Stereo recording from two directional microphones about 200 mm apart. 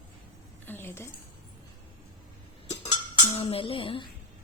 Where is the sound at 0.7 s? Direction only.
10° left (ahead or behind).